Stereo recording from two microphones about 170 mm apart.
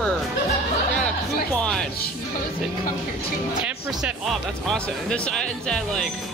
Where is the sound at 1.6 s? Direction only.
5° left (ahead or behind).